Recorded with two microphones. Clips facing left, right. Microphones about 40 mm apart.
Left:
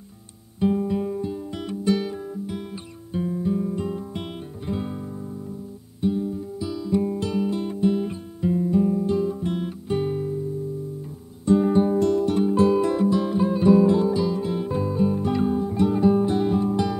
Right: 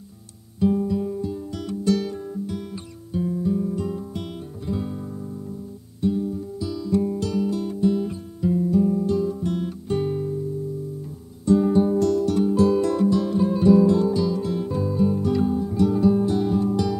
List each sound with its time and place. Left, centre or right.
0.6 s music: left
11.4 s music: left